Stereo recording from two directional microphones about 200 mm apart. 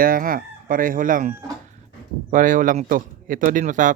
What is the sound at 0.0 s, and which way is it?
Chicken, 45° right (ahead or behind).